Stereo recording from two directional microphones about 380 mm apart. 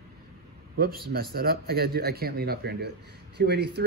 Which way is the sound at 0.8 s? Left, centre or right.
Right.